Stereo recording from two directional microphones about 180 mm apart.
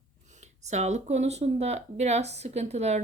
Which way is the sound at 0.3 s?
40° right (ahead or behind).